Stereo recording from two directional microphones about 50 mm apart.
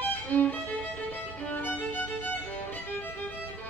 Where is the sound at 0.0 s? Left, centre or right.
Left.